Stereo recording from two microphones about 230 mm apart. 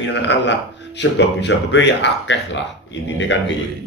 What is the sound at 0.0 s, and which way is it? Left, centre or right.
Speech, left.